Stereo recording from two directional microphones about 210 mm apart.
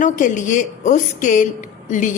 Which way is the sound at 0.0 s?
35° left (ahead or behind).